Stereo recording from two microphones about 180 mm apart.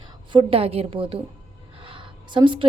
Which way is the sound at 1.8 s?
30° right (ahead or behind).